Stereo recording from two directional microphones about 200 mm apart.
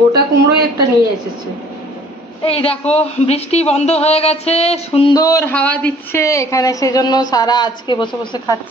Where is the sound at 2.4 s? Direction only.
30° left (ahead or behind).